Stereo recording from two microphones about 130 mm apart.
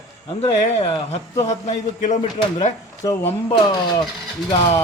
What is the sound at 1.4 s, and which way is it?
Speech, 65° left (ahead or behind).